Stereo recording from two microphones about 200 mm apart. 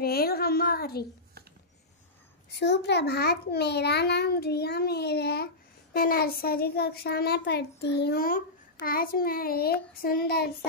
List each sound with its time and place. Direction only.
0.0 s a child's voice: 50° left (ahead or behind)
2.6 s a child's voice: 55° left (ahead or behind)